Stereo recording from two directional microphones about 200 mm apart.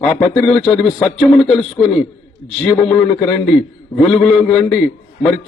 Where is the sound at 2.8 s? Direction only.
Centre (ahead or behind).